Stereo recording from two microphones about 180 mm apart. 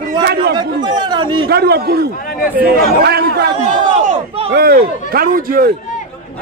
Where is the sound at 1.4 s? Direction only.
65° right (ahead or behind).